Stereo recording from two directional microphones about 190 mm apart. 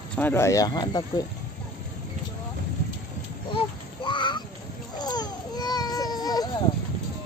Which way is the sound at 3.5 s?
25° left (ahead or behind).